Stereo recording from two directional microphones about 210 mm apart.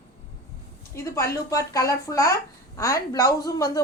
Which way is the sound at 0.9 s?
15° left (ahead or behind).